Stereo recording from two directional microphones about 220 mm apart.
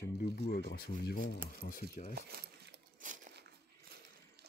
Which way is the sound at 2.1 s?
45° right (ahead or behind).